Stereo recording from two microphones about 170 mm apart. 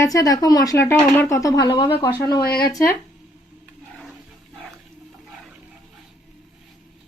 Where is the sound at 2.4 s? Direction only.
65° left (ahead or behind).